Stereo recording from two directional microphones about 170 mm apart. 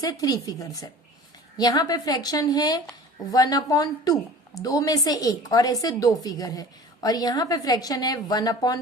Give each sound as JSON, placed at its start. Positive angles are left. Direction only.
{"t": 0.0, "sound": "a woman's voice", "side_deg": 20}